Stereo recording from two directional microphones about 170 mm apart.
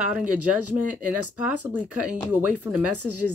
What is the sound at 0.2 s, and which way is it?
Speech, 10° right (ahead or behind).